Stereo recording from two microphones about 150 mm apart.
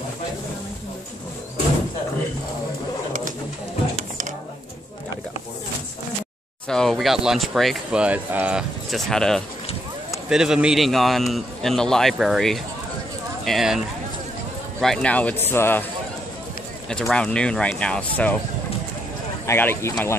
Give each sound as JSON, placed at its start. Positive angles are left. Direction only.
{"t": 6.7, "sound": "speech", "side_deg": 5}
{"t": 16.9, "sound": "speech", "side_deg": 5}
{"t": 19.4, "sound": "speech", "side_deg": 15}